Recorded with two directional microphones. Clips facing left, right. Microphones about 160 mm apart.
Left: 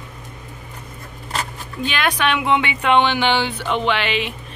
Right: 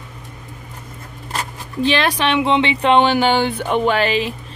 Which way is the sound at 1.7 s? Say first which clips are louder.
Right 4 dB; 30° right (ahead or behind).